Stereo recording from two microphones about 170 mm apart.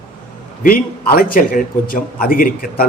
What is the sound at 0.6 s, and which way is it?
A man's voice, 60° left (ahead or behind).